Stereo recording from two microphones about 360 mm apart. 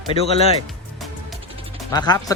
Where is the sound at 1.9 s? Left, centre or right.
Centre.